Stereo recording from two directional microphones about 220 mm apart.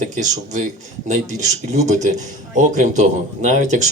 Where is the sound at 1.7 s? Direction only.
30° right (ahead or behind).